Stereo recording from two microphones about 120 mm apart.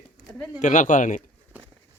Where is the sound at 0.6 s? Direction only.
90° left.